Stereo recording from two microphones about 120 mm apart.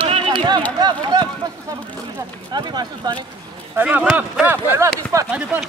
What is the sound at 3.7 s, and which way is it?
Speech, 15° right (ahead or behind).